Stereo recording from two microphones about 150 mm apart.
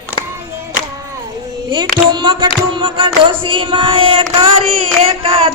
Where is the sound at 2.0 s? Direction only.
35° right (ahead or behind).